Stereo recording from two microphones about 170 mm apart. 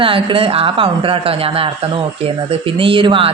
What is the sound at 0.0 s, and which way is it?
Speech, 30° right (ahead or behind).